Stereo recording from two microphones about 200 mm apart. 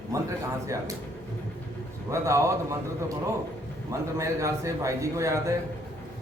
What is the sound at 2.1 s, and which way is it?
Speech, 15° right (ahead or behind).